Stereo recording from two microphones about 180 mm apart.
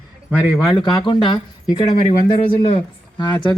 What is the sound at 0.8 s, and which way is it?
Speech, 25° left (ahead or behind).